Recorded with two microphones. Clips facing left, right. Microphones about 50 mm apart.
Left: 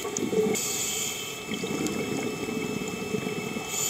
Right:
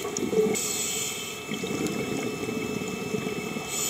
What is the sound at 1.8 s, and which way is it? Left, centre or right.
Boat, centre.